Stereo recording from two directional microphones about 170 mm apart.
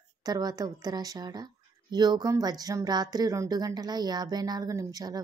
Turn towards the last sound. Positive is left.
turn(degrees=-20)  # may be behind; listen again after turning